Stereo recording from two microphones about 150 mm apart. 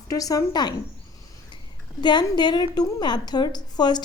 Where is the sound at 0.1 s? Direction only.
20° left (ahead or behind).